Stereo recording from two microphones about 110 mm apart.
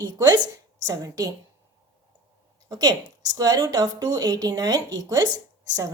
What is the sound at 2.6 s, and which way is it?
A woman's voice, 35° right (ahead or behind).